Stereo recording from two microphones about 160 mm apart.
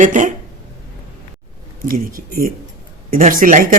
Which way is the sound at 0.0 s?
50° right (ahead or behind).